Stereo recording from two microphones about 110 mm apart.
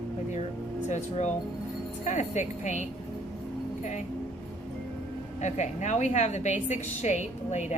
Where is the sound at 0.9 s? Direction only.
90° left.